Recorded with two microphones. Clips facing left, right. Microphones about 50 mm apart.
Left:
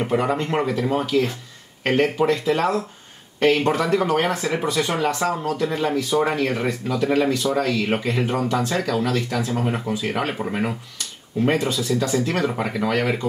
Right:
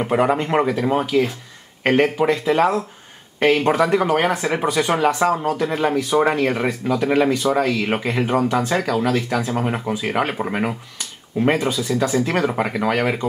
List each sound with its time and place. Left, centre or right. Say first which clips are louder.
0.0 s speech: right 3 dB; centre